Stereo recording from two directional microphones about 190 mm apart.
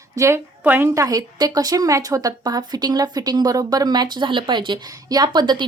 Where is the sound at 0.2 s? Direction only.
15° right (ahead or behind).